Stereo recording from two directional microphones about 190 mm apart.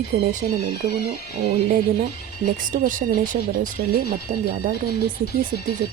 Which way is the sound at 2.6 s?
45° right (ahead or behind).